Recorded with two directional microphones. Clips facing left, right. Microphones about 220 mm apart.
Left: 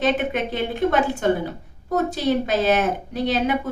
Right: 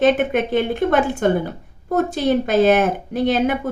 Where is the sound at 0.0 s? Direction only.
50° right (ahead or behind).